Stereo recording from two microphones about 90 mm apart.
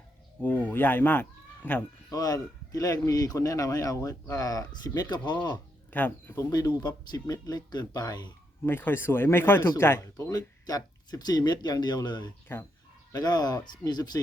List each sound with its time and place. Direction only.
0.4 s speech: 20° left (ahead or behind)
2.0 s speech: 45° left (ahead or behind)
5.9 s speech: 20° left (ahead or behind)
6.3 s speech: 45° left (ahead or behind)
8.6 s speech: 25° left (ahead or behind)
10.2 s speech: 40° left (ahead or behind)
12.5 s speech: 25° left (ahead or behind)
13.1 s speech: 50° left (ahead or behind)